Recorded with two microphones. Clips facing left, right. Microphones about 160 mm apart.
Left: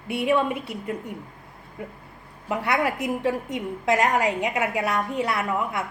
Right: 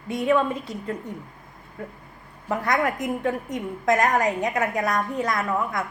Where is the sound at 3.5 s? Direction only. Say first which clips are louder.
Right 1 dB; 20° left (ahead or behind).